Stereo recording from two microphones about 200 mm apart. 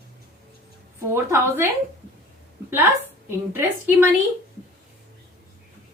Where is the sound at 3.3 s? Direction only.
10° right (ahead or behind).